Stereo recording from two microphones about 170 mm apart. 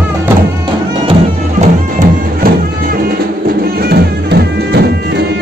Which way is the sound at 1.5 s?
55° right (ahead or behind).